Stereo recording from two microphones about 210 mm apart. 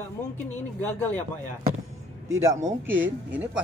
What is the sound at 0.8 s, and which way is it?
Speech, 10° left (ahead or behind).